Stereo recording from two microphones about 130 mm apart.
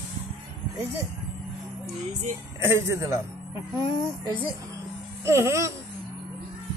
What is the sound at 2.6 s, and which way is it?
Speech, 20° right (ahead or behind).